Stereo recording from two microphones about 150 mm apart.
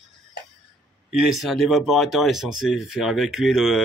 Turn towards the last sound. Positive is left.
turn(degrees=0)  # may be behind; listen again after turning